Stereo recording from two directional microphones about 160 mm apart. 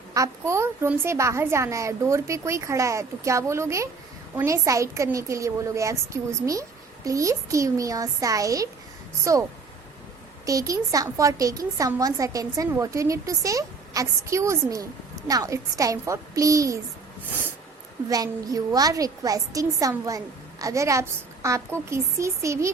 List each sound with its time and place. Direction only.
0.1 s a child's voice: 20° right (ahead or behind)
10.4 s a child's voice: 20° right (ahead or behind)
18.1 s a child's voice: 25° right (ahead or behind)